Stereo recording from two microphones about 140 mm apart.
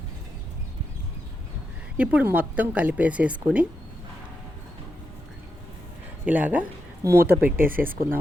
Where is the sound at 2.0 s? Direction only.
10° right (ahead or behind).